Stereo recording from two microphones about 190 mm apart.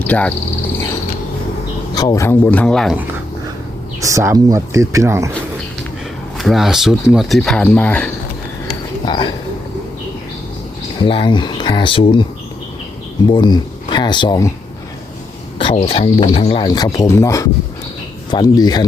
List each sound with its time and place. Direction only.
0.1 s speech: 5° left (ahead or behind)
2.0 s a man's voice: 15° left (ahead or behind); by 3.0 s centre (ahead or behind)
4.0 s speech: 15° right (ahead or behind)
6.3 s speech: centre (ahead or behind)
9.0 s speech: 25° left (ahead or behind)
11.0 s speech: 25° left (ahead or behind)
13.2 s speech: 25° left (ahead or behind)
15.5 s speech: 30° left (ahead or behind)